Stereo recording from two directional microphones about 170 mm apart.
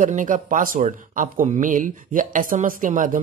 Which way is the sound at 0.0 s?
50° right (ahead or behind).